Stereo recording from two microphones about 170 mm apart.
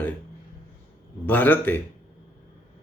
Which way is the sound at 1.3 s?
10° left (ahead or behind).